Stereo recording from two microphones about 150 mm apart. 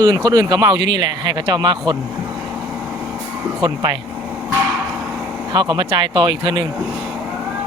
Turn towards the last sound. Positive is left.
turn(degrees=-30)  # may be behind; listen again after turning